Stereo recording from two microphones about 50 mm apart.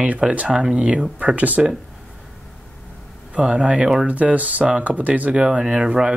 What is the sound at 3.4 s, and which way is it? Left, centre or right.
Speech, centre.